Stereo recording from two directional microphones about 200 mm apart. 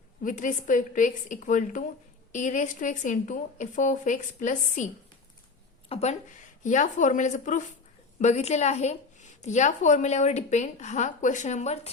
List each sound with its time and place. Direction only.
0.2 s a woman's voice: 40° left (ahead or behind)
5.9 s a woman's voice: 35° left (ahead or behind)